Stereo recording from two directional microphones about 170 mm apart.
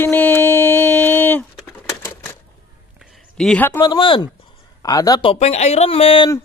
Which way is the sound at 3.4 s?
5° left (ahead or behind).